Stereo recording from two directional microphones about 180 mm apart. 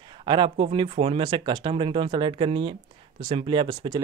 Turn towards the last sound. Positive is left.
turn(degrees=-20)  # may be behind; listen again after turning